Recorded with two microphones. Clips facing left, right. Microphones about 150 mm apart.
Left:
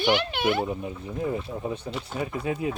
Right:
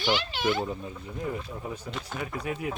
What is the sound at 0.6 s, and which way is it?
Speech, 15° left (ahead or behind).